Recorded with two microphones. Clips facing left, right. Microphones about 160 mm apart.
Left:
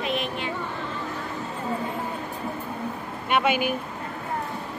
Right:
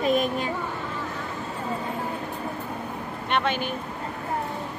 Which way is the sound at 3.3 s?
10° left (ahead or behind).